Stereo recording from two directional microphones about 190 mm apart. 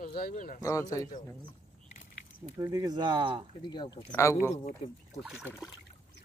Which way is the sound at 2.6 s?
20° right (ahead or behind).